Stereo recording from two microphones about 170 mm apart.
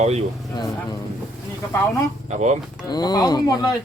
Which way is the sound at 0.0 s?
40° right (ahead or behind).